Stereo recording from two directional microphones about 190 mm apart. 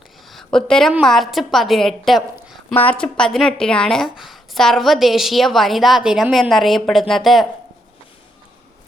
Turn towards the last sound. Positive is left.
turn(degrees=0)  # may be behind; listen again after turning